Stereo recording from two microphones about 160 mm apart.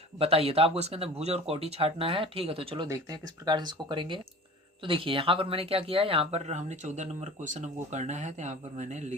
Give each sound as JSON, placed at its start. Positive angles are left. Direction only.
{"t": 0.2, "sound": "speech", "side_deg": -40}